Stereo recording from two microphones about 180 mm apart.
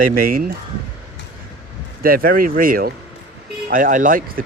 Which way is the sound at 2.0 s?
55° right (ahead or behind).